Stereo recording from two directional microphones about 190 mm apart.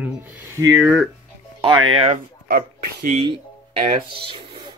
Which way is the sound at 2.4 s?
45° right (ahead or behind).